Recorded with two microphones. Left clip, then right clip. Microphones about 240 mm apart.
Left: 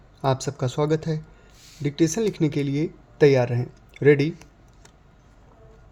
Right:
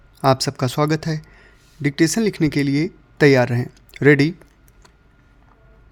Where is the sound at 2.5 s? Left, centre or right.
Right.